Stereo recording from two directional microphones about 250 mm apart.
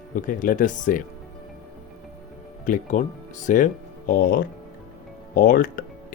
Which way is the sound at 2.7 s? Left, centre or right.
Left.